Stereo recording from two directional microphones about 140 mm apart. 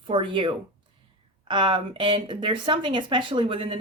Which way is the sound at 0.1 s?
35° right (ahead or behind).